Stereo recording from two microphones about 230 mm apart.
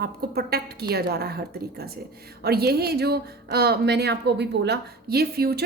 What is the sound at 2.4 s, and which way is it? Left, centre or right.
Speech, right.